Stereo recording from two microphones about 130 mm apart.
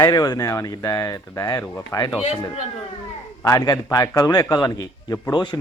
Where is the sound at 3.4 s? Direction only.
25° left (ahead or behind).